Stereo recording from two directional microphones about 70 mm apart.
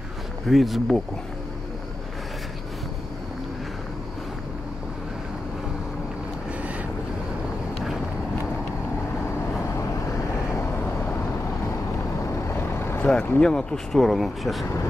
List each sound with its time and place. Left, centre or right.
0.5 s speech: centre
12.4 s vehicle: left
13.0 s speech: centre